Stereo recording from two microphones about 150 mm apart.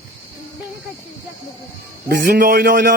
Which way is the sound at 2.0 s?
85° right.